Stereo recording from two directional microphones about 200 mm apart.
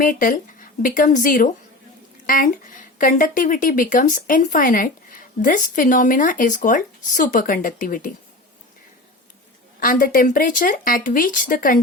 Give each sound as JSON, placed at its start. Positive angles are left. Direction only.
{"t": 0.0, "sound": "speech", "side_deg": 45}
{"t": 9.8, "sound": "speech", "side_deg": 45}